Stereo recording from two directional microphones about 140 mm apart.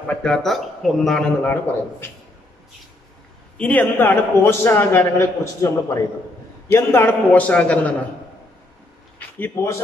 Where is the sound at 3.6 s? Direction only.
10° left (ahead or behind).